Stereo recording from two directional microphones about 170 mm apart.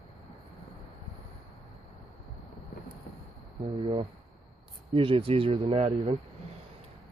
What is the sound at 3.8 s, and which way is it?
Speech, 30° right (ahead or behind).